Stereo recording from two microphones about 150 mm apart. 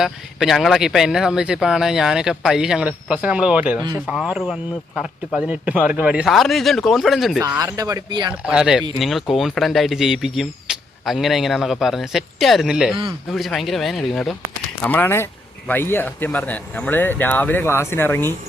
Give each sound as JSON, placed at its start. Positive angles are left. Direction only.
{"t": 0.0, "sound": "speech", "side_deg": 0}
{"t": 7.6, "sound": "speech", "side_deg": -25}
{"t": 8.3, "sound": "speech", "side_deg": -10}
{"t": 14.8, "sound": "speech", "side_deg": 10}